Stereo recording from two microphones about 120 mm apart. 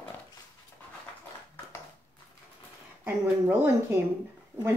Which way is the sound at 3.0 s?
15° right (ahead or behind).